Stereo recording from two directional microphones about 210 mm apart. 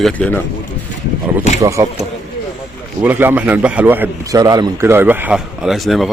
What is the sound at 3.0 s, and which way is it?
A man's voice, 10° right (ahead or behind).